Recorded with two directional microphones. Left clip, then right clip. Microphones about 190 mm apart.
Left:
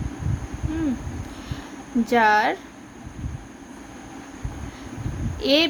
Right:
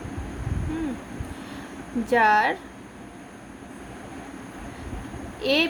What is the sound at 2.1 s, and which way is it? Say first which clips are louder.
Child singing: left 1 dB; 15° left (ahead or behind).